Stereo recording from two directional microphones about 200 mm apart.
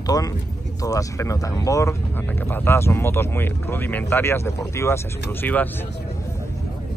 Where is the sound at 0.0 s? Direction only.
20° left (ahead or behind).